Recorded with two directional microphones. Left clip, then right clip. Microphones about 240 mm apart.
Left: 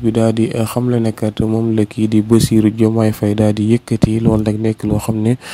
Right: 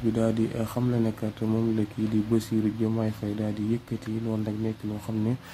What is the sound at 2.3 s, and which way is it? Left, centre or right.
Speech, left.